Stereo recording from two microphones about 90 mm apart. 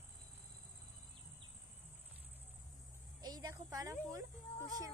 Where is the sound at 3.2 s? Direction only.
45° right (ahead or behind).